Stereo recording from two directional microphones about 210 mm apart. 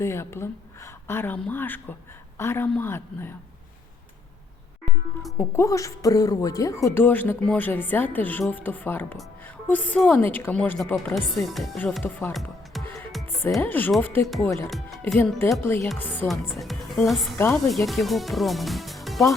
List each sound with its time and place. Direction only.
0.0 s a woman's voice: 10° left (ahead or behind)
5.4 s a woman's voice: 15° left (ahead or behind)
14.7 s speech: centre (ahead or behind)